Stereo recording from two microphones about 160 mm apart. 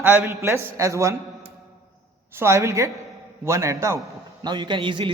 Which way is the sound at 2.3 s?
15° right (ahead or behind).